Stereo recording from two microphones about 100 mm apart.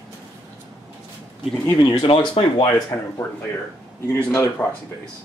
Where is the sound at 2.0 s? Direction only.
65° left (ahead or behind).